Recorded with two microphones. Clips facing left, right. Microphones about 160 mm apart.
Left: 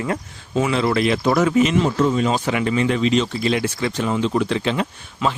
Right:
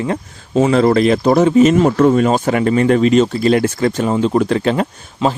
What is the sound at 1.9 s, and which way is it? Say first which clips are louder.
Speech: right 7 dB; 55° right (ahead or behind).